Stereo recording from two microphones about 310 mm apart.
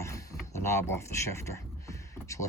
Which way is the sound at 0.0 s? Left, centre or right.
Centre.